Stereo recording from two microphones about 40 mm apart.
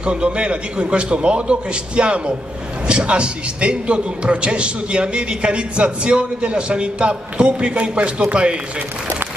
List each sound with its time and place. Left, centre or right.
0.0 s a man's voice: right